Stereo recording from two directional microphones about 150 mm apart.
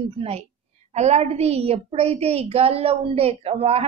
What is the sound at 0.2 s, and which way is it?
A woman's voice, 40° right (ahead or behind).